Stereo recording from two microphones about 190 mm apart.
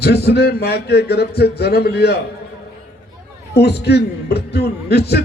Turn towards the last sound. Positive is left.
turn(degrees=60)  # may be behind; listen again after turning